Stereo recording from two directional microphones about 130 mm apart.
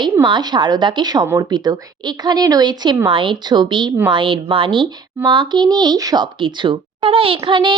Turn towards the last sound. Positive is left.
turn(degrees=-40)  # may be behind; listen again after turning